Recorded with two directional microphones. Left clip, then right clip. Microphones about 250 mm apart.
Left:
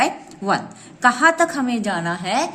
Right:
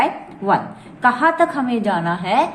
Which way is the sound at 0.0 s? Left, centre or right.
Left.